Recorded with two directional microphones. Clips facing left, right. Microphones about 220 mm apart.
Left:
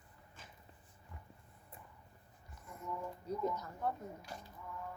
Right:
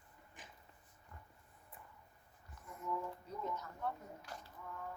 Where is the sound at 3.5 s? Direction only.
40° left (ahead or behind).